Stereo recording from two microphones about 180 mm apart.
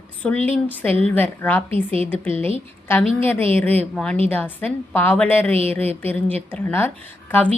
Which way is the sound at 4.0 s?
5° left (ahead or behind).